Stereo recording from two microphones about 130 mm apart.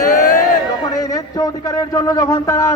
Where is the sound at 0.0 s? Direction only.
90° left.